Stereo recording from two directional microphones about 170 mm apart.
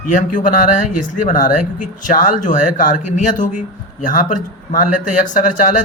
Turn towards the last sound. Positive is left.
turn(degrees=50)  # may be behind; listen again after turning